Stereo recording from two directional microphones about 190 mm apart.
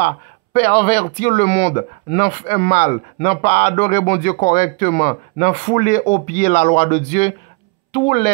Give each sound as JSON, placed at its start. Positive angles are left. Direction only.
{"t": 0.0, "sound": "speech", "side_deg": 35}